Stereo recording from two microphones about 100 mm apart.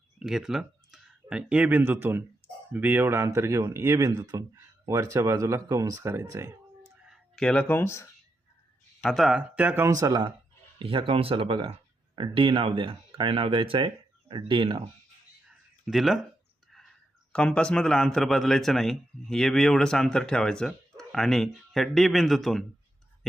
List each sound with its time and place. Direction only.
0.2 s speech: 5° right (ahead or behind); by 6.5 s 30° right (ahead or behind)
7.3 s speech: 10° left (ahead or behind); by 8.1 s 25° left (ahead or behind)
9.0 s speech: centre (ahead or behind)
9.4 s speech: 15° right (ahead or behind)
9.8 s speech: 35° right (ahead or behind)
10.8 s speech: 60° right (ahead or behind)
15.9 s a man's voice: centre (ahead or behind)
17.3 s a man's voice: 10° left (ahead or behind)